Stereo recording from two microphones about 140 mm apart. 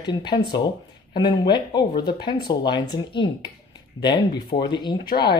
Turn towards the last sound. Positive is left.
turn(degrees=30)  # may be behind; listen again after turning